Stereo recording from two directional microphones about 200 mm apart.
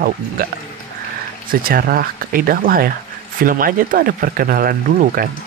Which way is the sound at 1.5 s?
45° right (ahead or behind).